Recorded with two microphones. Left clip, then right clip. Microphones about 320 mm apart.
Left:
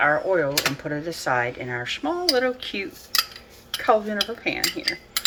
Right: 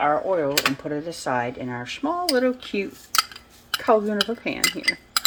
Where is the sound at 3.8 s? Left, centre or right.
Right.